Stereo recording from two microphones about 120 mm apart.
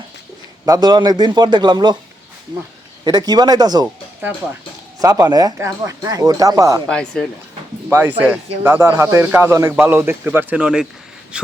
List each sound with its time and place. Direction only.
0.6 s speech: 35° right (ahead or behind)
3.0 s speech: 35° right (ahead or behind)
4.9 s speech: 30° right (ahead or behind)
6.8 s speech: 5° left (ahead or behind)
7.9 s a man's voice: 20° right (ahead or behind)